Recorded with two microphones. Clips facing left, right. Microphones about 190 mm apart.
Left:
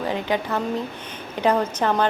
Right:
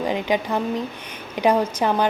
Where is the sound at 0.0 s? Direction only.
15° right (ahead or behind).